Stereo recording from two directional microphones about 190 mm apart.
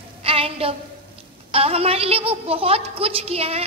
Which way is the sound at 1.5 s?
30° right (ahead or behind).